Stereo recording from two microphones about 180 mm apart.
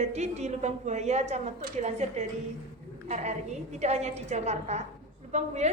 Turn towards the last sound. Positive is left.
turn(degrees=-40)  # may be behind; listen again after turning